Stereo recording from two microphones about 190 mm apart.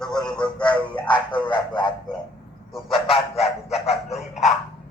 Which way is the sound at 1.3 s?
25° left (ahead or behind).